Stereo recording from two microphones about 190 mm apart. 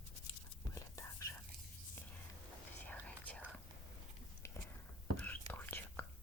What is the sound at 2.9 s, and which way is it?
Whispering, 10° left (ahead or behind).